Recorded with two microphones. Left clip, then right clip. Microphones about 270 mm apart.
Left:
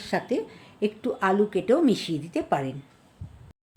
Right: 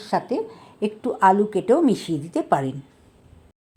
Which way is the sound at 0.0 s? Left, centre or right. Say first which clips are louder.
Right 4 dB; centre.